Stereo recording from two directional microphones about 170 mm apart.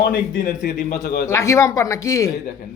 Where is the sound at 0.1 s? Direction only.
55° left (ahead or behind).